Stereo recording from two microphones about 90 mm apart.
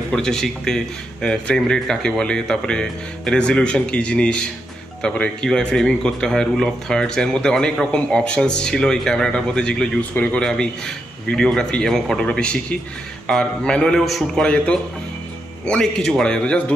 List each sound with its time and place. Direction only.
0.1 s speech: 5° left (ahead or behind)
10.4 s speech: 5° left (ahead or behind)